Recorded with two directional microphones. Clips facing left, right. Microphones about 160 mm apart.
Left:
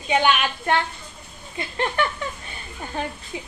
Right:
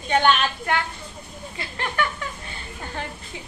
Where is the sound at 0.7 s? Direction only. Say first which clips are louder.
Left 3 dB; 25° left (ahead or behind).